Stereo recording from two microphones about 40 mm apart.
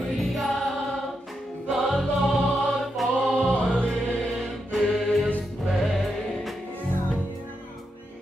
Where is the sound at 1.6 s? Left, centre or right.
Centre.